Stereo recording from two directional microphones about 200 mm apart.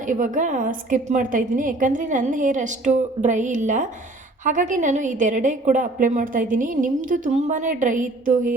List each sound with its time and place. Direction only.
0.0 s a woman's voice: 40° right (ahead or behind)